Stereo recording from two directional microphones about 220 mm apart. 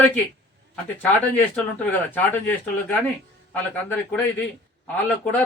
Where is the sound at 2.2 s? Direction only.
10° left (ahead or behind).